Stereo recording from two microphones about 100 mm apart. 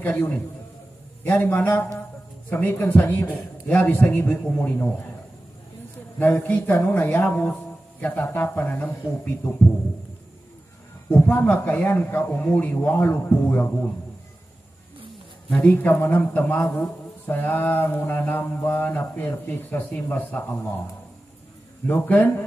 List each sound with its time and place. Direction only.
0.0 s speech: 15° left (ahead or behind)
1.2 s mantra: 20° left (ahead or behind)
3.6 s speech: 15° left (ahead or behind)
6.1 s speech: 20° left (ahead or behind)
8.3 s mantra: 20° left (ahead or behind)
11.1 s speech: 20° left (ahead or behind)
15.6 s speech: 20° left (ahead or behind)
16.1 s mantra: 20° left (ahead or behind)
21.8 s speech: 20° left (ahead or behind)